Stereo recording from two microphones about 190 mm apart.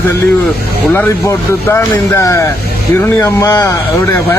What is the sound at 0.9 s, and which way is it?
Speech, 15° left (ahead or behind).